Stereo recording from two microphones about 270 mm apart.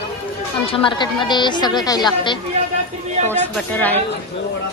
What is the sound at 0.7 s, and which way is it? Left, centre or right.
Speech, centre.